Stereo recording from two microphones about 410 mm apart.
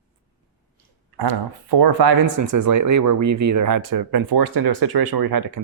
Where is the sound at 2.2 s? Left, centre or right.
Right.